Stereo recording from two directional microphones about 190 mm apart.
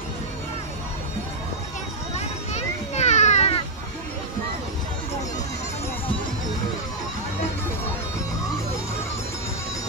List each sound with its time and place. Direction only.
2.1 s children playing: 35° left (ahead or behind)